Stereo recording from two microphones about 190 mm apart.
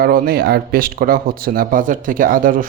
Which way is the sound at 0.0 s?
55° right (ahead or behind).